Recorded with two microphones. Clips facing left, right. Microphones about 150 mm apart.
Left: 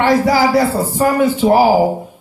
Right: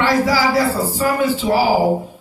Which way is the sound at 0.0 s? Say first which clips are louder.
Left 4 dB; 50° left (ahead or behind).